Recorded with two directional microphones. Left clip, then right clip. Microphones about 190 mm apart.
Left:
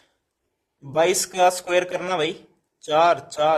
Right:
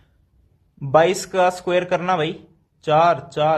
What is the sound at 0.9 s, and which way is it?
Speech, 25° left (ahead or behind).